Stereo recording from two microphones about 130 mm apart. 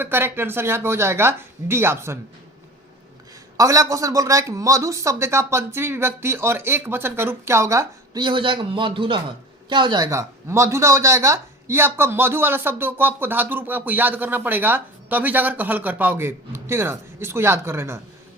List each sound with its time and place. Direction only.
0.0 s speech: 15° right (ahead or behind)
3.6 s speech: 25° right (ahead or behind)
8.2 s a man's voice: 40° right (ahead or behind)
10.1 s speech: 20° right (ahead or behind)